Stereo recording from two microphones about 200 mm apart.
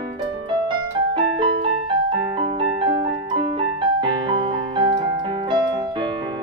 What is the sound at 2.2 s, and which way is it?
Piano, 25° right (ahead or behind).